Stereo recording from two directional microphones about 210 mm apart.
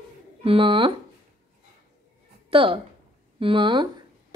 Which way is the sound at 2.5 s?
25° right (ahead or behind).